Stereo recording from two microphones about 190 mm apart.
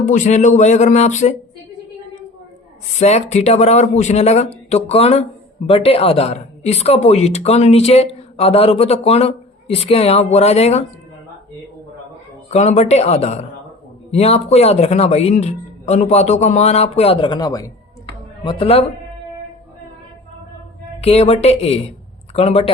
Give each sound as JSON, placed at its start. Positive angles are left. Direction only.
{"t": 0.1, "sound": "speech", "side_deg": 40}
{"t": 3.0, "sound": "speech", "side_deg": 35}
{"t": 12.5, "sound": "a man's voice", "side_deg": 35}
{"t": 21.0, "sound": "speech", "side_deg": 35}